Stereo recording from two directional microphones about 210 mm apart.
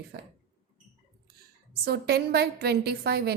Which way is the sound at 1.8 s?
50° right (ahead or behind).